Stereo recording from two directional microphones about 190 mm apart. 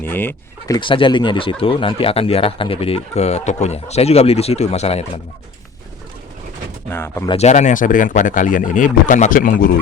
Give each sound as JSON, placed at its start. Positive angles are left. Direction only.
{"t": 0.0, "sound": "speech", "side_deg": 10}
{"t": 0.8, "sound": "speech", "side_deg": 25}
{"t": 6.9, "sound": "speech", "side_deg": 15}
{"t": 7.3, "sound": "speech", "side_deg": 35}